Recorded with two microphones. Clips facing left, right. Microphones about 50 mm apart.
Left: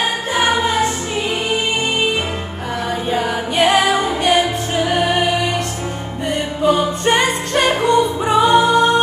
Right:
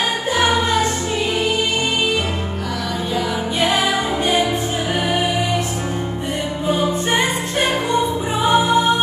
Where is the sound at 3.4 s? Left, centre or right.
Left.